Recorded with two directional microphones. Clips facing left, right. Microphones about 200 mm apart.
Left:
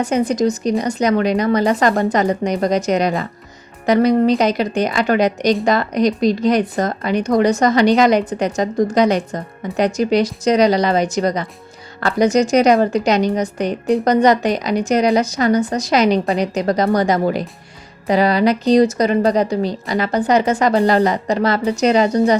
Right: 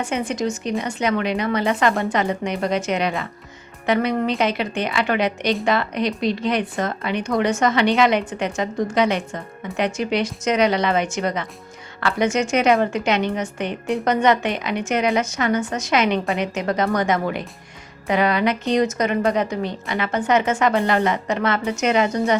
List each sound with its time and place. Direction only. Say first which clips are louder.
0.0 s speech: left 7 dB; 40° left (ahead or behind)